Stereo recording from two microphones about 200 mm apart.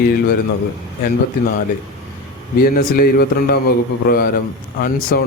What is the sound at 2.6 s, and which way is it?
A man's voice, 45° left (ahead or behind).